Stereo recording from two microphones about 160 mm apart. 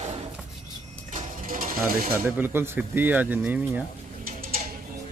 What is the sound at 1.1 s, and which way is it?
Mechanisms, 55° right (ahead or behind).